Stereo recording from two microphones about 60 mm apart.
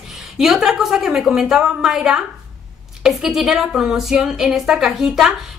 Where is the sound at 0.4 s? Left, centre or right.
Centre.